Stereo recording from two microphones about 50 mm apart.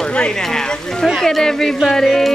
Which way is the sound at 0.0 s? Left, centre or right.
Centre.